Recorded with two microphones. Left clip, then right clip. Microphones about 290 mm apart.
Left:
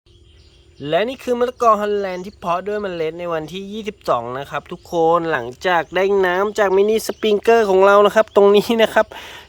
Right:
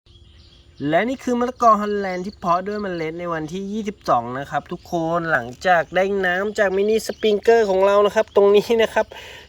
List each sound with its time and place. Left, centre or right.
0.8 s speech: centre